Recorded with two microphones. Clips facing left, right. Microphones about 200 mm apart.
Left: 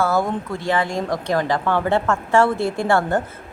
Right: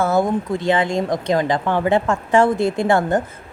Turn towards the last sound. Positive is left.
turn(degrees=-20)  # may be behind; listen again after turning